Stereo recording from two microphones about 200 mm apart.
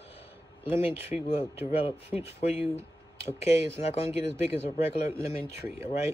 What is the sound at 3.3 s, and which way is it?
Speech, 30° left (ahead or behind).